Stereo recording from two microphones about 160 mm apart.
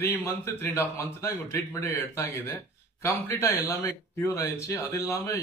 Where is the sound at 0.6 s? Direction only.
15° left (ahead or behind).